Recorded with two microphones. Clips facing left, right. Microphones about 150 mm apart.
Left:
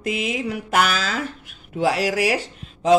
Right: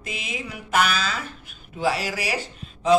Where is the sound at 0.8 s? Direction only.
90° left.